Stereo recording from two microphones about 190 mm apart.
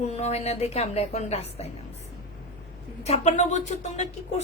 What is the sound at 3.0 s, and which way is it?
A woman's voice, 35° left (ahead or behind).